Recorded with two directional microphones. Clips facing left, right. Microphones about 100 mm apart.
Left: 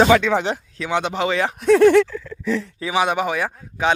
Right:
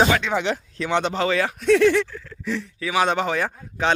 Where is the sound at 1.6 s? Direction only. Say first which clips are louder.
Left 4 dB; 40° left (ahead or behind).